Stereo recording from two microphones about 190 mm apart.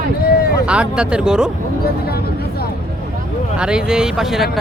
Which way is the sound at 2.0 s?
55° left (ahead or behind).